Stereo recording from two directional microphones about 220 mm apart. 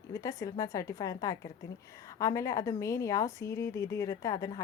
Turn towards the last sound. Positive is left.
turn(degrees=15)  # may be behind; listen again after turning